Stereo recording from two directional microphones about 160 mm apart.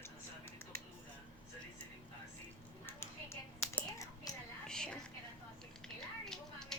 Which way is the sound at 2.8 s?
15° left (ahead or behind).